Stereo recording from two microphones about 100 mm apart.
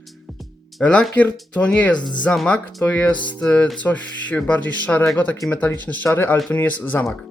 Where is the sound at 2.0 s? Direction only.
50° left (ahead or behind).